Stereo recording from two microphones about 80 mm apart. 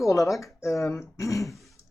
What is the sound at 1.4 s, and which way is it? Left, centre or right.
Throat clearing, centre.